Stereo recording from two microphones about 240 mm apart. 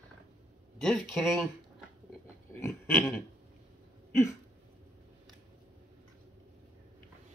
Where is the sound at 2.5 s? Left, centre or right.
Centre.